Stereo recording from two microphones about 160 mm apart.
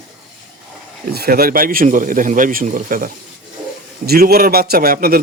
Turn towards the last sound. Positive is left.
turn(degrees=-65)  # may be behind; listen again after turning